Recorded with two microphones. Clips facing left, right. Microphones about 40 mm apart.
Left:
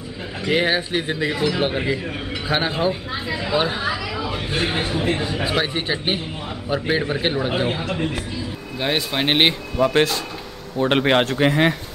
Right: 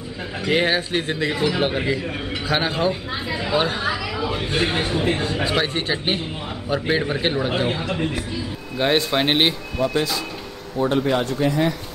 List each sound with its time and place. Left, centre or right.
0.4 s a man's voice: centre
9.8 s speech: left
10.9 s speech: left